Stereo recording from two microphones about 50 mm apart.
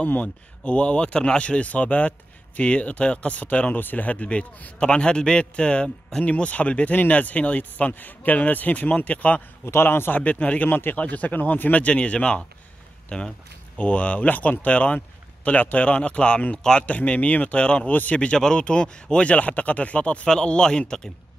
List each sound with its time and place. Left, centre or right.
0.0 s a man's voice: left
9.7 s a man's voice: left
10.2 s speech: left
11.0 s a man's voice: left; by 13.3 s centre
13.7 s a man's voice: left
16.8 s speech: left
17.8 s a man's voice: left; by 21.1 s centre